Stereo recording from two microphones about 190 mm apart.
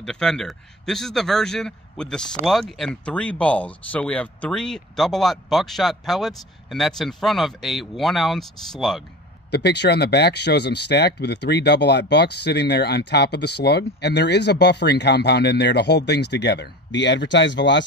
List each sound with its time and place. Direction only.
0.0 s speech: 5° left (ahead or behind)
9.5 s speech: 65° left (ahead or behind)